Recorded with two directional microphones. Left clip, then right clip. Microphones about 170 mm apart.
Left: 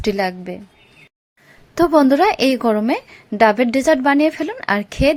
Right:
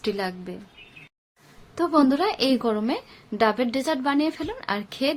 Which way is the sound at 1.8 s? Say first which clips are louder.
Left 8 dB; 45° left (ahead or behind).